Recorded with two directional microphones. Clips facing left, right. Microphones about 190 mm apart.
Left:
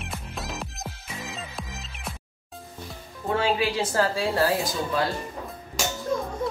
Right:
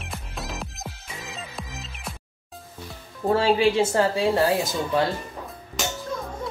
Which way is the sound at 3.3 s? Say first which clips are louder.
Right 5 dB; 30° right (ahead or behind).